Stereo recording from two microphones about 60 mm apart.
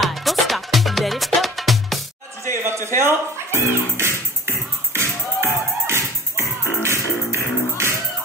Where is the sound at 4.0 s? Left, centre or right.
Right.